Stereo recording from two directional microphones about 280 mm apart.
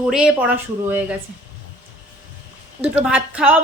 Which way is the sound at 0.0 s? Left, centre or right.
Centre.